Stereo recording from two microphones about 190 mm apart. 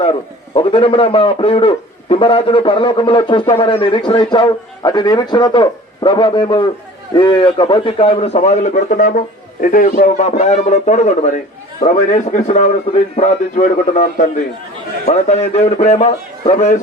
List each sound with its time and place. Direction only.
0.0 s a man's voice: 30° left (ahead or behind)